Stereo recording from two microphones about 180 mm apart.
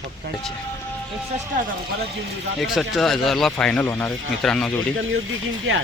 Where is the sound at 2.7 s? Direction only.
Centre (ahead or behind).